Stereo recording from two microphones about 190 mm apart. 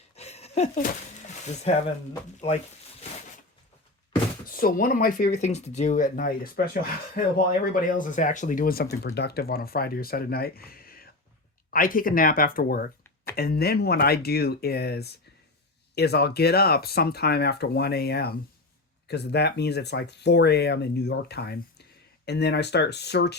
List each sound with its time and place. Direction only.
0.2 s a sound: 35° left (ahead or behind)
1.7 s speech: 35° left (ahead or behind)
4.4 s speech: 50° left (ahead or behind)